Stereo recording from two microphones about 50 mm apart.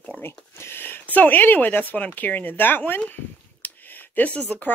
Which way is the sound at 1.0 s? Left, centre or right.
Left.